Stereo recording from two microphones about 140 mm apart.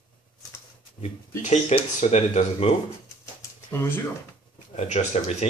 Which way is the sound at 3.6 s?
15° left (ahead or behind).